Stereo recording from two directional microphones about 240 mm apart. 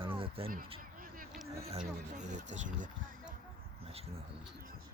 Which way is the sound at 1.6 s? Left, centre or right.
Right.